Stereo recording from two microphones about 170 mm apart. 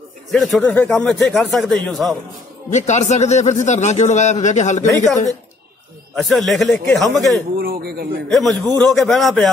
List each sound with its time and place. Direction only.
0.3 s speech: centre (ahead or behind)
2.7 s speech: 45° left (ahead or behind)
4.8 s speech: 20° left (ahead or behind)
6.1 s speech: centre (ahead or behind)
7.5 s a man's voice: 60° right (ahead or behind)
8.3 s speech: centre (ahead or behind)